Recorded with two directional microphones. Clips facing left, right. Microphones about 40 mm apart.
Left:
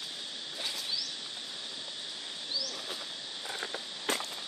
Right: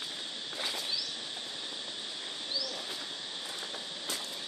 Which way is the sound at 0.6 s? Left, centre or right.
Centre.